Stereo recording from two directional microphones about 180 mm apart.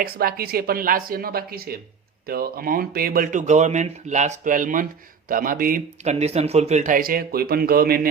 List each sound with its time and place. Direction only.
0.0 s speech: 55° right (ahead or behind)